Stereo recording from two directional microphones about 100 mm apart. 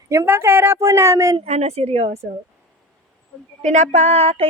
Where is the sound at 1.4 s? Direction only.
90° right.